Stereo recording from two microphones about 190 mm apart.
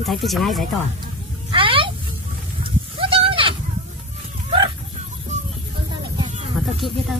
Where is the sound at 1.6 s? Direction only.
30° right (ahead or behind).